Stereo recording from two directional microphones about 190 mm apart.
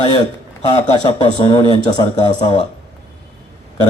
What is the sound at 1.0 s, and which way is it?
A man's voice, 25° left (ahead or behind).